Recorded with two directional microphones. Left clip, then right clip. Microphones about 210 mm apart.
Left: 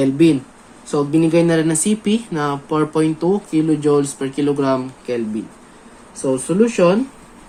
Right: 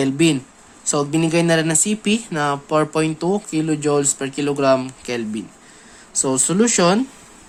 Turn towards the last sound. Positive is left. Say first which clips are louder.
# left 2 dB
turn(degrees=-50)  # may be behind; listen again after turning